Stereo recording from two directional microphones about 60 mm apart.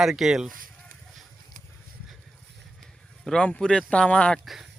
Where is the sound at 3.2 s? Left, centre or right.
Centre.